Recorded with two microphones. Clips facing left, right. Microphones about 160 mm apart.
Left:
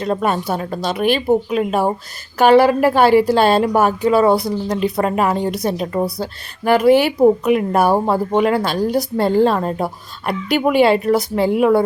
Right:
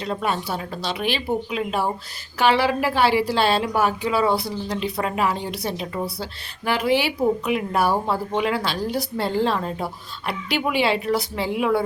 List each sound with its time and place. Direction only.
0.0 s speech: 50° left (ahead or behind)